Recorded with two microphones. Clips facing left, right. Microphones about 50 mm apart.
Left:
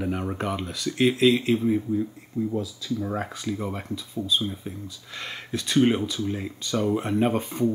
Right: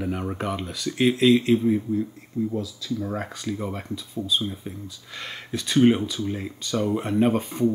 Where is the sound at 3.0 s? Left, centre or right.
Centre.